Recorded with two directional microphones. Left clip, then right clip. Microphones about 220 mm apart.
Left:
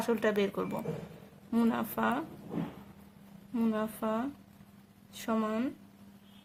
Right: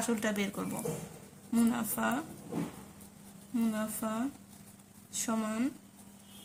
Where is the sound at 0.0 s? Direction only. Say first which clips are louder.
Left 4 dB; 40° left (ahead or behind).